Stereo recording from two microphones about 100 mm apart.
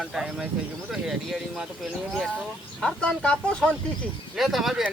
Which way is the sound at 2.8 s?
5° left (ahead or behind).